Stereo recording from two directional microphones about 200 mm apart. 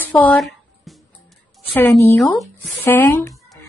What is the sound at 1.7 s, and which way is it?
Speech, 10° left (ahead or behind).